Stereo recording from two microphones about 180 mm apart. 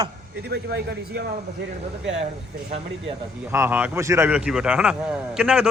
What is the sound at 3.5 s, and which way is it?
Speech, 10° right (ahead or behind).